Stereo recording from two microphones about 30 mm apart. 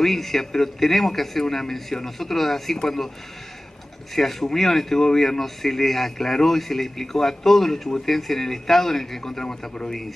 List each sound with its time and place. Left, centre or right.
0.0 s a man's voice: centre
4.1 s a man's voice: centre
9.4 s a man's voice: left